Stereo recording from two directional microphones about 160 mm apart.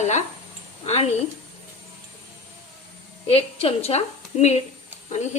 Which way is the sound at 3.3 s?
35° left (ahead or behind).